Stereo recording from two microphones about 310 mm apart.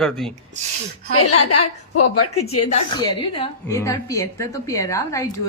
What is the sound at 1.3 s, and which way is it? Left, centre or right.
A woman's voice, left.